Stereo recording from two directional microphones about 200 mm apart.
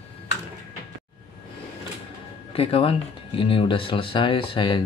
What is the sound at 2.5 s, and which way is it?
Speech, 30° left (ahead or behind).